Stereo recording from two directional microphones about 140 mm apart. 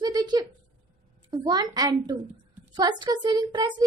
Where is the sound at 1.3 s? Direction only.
30° right (ahead or behind).